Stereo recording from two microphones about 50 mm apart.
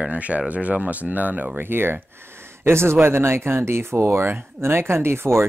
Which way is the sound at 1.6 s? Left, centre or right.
Right.